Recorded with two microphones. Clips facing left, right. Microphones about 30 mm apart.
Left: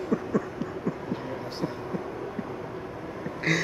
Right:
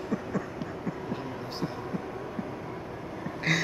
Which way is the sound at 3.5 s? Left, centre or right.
Centre.